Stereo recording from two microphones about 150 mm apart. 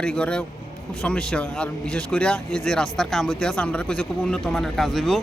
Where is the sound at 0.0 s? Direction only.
5° left (ahead or behind).